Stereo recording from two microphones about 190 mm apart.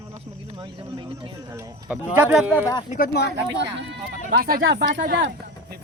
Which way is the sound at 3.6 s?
70° right (ahead or behind).